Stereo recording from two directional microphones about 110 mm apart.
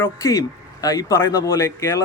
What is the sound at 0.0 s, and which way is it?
Speech, 30° left (ahead or behind).